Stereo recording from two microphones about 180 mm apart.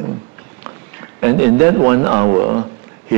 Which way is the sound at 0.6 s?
10° right (ahead or behind).